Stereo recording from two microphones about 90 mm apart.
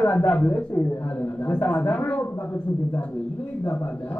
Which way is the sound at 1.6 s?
15° left (ahead or behind).